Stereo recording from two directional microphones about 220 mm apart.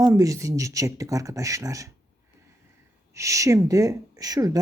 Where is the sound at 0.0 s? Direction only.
15° right (ahead or behind).